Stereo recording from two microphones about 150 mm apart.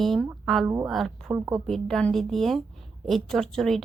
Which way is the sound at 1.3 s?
25° right (ahead or behind).